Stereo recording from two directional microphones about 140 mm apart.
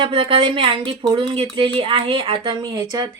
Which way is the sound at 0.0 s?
40° right (ahead or behind).